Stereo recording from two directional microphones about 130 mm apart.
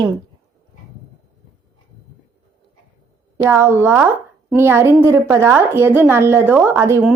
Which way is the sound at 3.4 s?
15° right (ahead or behind).